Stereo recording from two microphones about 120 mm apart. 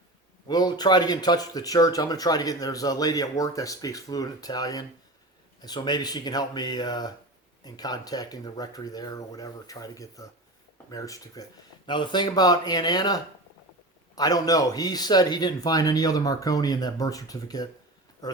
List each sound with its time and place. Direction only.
0.4 s speech: 35° left (ahead or behind)